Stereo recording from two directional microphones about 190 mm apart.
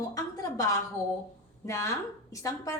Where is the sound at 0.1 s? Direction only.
20° left (ahead or behind).